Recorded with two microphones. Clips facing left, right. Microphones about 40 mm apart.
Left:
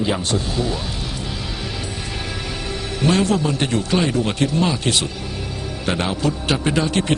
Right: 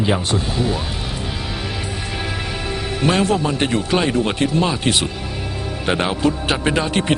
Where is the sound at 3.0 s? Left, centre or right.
Centre.